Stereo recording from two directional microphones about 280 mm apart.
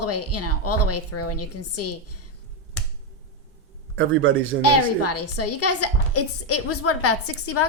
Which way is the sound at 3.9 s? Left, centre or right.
Right.